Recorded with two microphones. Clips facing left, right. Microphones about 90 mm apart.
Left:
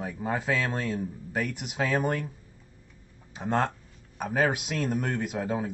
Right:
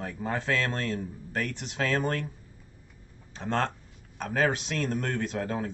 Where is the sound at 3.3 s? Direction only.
15° left (ahead or behind).